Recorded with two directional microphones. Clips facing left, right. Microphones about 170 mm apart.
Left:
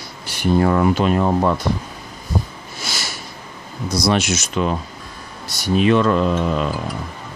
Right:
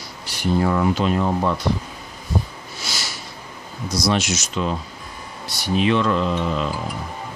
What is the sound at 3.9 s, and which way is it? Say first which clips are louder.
Speech: left 3 dB; 55° left (ahead or behind).